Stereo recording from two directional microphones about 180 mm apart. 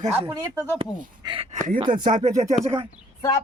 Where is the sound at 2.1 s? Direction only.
40° right (ahead or behind).